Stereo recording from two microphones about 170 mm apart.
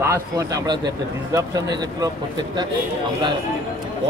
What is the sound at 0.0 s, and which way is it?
Speech, 20° right (ahead or behind).